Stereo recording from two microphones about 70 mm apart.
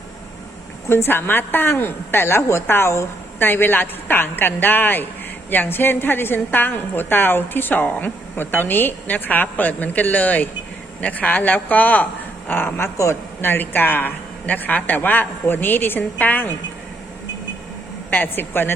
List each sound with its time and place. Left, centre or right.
0.9 s a woman's voice: left
3.4 s a woman's voice: left
18.1 s a woman's voice: left